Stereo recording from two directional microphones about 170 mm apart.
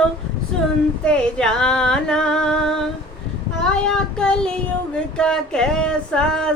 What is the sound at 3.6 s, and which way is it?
Child singing, 5° left (ahead or behind).